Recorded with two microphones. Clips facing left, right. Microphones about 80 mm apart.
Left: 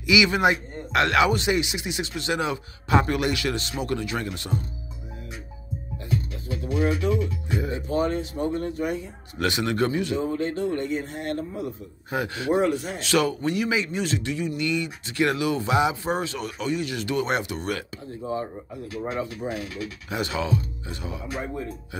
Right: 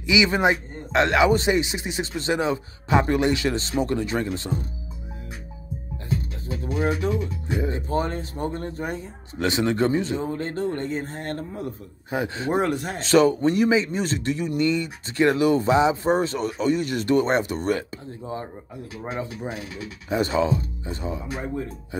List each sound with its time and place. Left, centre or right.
0.0 s speech: right
6.0 s music: right
7.9 s speech: right
9.4 s speech: right
12.1 s speech: right
12.6 s a man's voice: right
13.0 s speech: right
20.1 s speech: right